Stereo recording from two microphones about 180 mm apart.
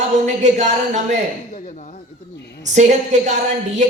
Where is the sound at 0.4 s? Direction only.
40° right (ahead or behind).